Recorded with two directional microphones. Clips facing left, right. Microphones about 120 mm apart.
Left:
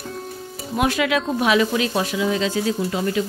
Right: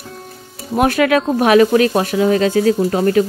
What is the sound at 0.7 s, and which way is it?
A woman's voice, 50° right (ahead or behind).